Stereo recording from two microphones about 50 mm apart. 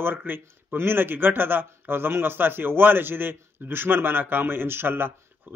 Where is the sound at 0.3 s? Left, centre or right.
Right.